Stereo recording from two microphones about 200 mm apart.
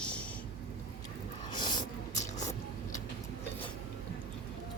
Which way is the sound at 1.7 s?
35° left (ahead or behind).